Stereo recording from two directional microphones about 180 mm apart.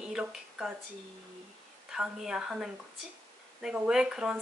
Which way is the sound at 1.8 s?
Centre (ahead or behind).